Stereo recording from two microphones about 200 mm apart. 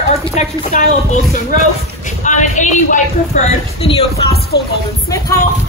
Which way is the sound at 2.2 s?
40° left (ahead or behind).